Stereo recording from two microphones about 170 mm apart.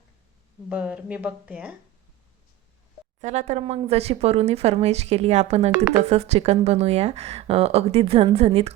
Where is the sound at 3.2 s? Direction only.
40° right (ahead or behind).